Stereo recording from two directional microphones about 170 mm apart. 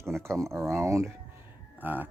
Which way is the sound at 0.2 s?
15° right (ahead or behind).